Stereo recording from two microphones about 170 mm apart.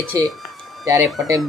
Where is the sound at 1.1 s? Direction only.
Centre (ahead or behind).